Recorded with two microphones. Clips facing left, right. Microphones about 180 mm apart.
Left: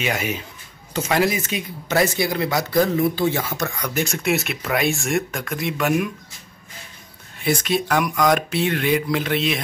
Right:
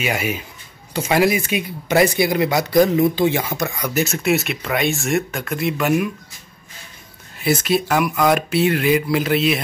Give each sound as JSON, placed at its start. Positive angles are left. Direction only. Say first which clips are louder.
{"t": 0.0, "sound": "speech", "louder": "right 2 dB", "side_deg": -10}
{"t": 7.3, "sound": "speech", "louder": "right 3 dB", "side_deg": -5}